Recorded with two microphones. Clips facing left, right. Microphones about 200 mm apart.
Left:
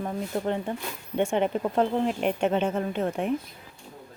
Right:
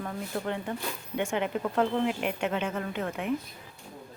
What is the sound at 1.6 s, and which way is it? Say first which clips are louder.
Speech: left 2 dB; 25° left (ahead or behind).